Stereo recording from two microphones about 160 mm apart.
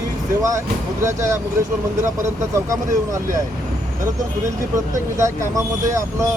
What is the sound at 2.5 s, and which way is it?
Speech, 20° right (ahead or behind).